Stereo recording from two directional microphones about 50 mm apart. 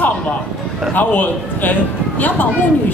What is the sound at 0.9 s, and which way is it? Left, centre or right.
Speech, left.